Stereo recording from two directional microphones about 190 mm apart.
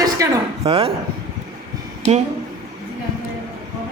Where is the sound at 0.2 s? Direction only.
15° right (ahead or behind).